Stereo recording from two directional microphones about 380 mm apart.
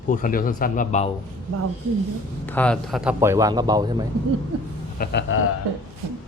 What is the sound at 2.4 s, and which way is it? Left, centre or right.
Speech, centre.